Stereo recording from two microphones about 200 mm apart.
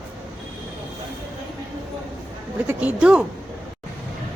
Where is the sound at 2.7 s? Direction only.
5° right (ahead or behind).